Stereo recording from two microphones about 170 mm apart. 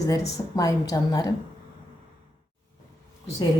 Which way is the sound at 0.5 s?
20° left (ahead or behind).